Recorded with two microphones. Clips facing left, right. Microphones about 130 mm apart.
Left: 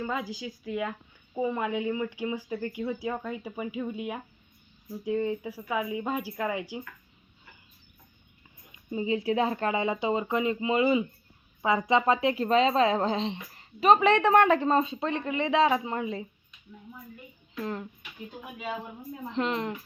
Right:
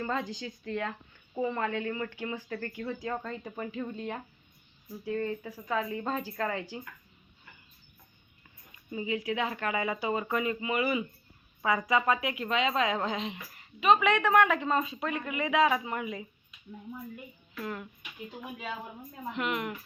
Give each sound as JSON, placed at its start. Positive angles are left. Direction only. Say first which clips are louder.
{"t": 0.0, "sound": "speech", "louder": "left 1 dB", "side_deg": 5}
{"t": 8.7, "sound": "speech", "louder": "left 4 dB", "side_deg": 30}
{"t": 17.5, "sound": "speech", "louder": "left 4 dB", "side_deg": 30}
{"t": 19.3, "sound": "speech", "louder": "left 3 dB", "side_deg": 30}